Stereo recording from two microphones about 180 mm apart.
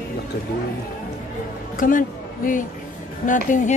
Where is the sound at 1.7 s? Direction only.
50° left (ahead or behind).